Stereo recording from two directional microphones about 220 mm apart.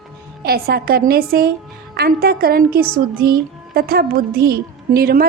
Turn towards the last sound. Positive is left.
turn(degrees=-45)  # may be behind; listen again after turning